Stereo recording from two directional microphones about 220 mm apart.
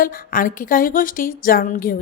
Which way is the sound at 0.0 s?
40° left (ahead or behind).